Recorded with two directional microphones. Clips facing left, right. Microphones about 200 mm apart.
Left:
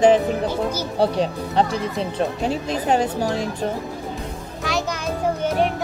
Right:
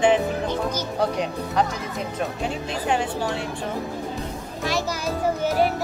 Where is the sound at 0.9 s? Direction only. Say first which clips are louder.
Left 6 dB; 30° left (ahead or behind).